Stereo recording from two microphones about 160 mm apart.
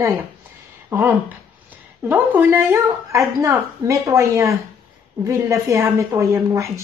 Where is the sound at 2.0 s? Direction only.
10° right (ahead or behind).